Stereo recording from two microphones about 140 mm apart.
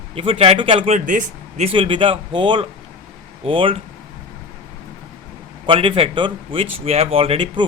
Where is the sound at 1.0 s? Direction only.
70° right (ahead or behind).